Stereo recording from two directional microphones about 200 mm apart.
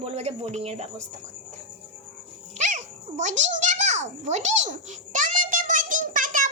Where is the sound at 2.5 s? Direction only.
35° right (ahead or behind).